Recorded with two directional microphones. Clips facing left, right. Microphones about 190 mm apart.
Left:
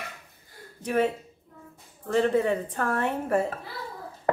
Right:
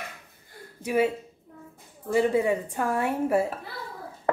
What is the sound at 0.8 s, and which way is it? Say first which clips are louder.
Speech: right 1 dB; 10° right (ahead or behind).